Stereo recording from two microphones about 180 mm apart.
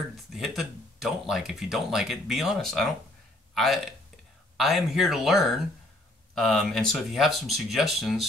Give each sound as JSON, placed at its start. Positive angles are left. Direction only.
{"t": 0.3, "sound": "speech", "side_deg": 0}